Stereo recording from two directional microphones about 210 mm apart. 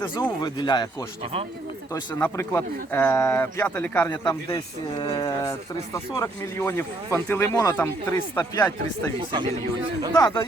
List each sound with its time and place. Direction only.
0.0 s speech: 15° left (ahead or behind)
10.2 s speech: 20° left (ahead or behind)